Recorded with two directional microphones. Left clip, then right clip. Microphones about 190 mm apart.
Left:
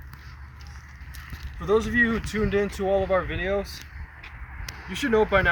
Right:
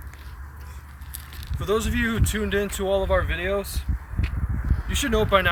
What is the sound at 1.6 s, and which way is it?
Speech, 25° right (ahead or behind).